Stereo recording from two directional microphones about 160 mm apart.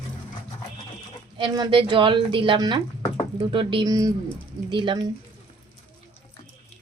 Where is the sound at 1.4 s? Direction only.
30° right (ahead or behind).